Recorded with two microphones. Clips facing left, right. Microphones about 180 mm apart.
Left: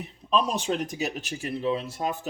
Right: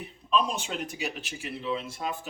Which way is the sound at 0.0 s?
40° left (ahead or behind).